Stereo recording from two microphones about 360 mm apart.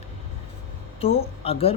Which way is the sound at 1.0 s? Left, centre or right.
Centre.